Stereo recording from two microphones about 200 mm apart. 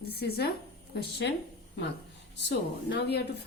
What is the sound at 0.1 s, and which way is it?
Speech, 50° left (ahead or behind).